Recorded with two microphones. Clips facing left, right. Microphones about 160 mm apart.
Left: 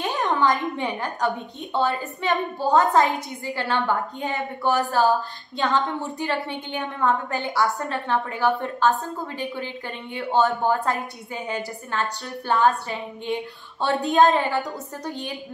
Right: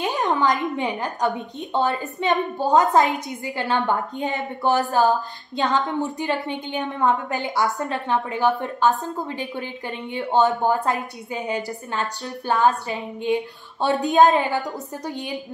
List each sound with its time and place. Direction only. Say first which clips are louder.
0.0 s a woman's voice: right 1 dB; 20° right (ahead or behind)
10.1 s a woman's voice: right 2 dB; 20° right (ahead or behind)